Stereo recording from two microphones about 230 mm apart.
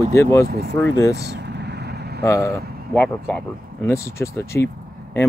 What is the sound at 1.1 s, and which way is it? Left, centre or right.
Vehicle, right.